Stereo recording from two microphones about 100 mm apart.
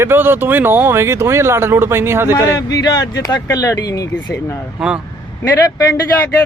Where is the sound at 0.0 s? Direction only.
20° right (ahead or behind).